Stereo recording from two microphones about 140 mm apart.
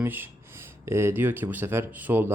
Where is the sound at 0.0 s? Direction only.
15° right (ahead or behind).